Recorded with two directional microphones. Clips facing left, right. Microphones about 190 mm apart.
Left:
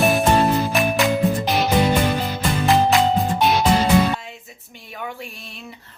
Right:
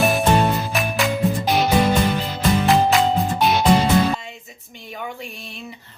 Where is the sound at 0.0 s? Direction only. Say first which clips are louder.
Left 1 dB; centre (ahead or behind).